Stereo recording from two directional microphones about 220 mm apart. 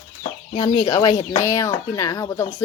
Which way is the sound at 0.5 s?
20° left (ahead or behind).